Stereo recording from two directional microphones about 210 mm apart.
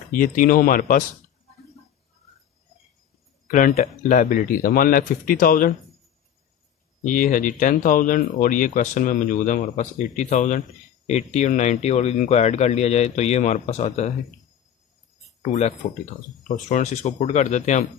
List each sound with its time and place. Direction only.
0.1 s speech: 40° left (ahead or behind)
3.5 s speech: 40° left (ahead or behind)
7.0 s speech: 40° left (ahead or behind)
15.4 s speech: 35° left (ahead or behind)